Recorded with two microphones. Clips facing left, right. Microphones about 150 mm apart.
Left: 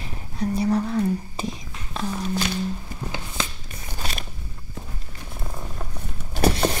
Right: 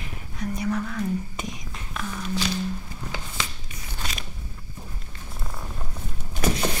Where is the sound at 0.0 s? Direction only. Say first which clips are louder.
Left 5 dB; 30° left (ahead or behind).